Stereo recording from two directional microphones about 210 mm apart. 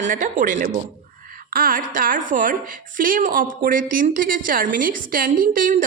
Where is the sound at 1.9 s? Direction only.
40° right (ahead or behind).